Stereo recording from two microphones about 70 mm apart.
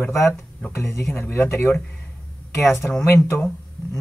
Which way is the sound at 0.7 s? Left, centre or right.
Left.